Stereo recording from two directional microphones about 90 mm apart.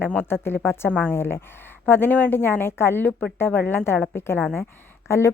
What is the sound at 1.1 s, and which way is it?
A woman's voice, 25° left (ahead or behind).